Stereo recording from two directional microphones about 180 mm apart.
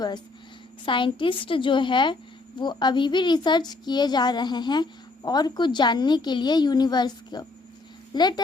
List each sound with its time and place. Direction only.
0.9 s a woman's voice: 30° left (ahead or behind)